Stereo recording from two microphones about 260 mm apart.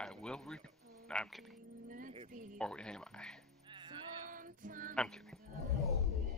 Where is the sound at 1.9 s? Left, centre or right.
Right.